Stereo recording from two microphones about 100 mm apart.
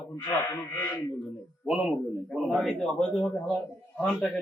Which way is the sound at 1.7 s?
5° right (ahead or behind).